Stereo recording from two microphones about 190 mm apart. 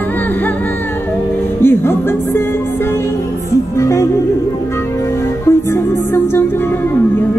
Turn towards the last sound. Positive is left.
turn(degrees=10)  # may be behind; listen again after turning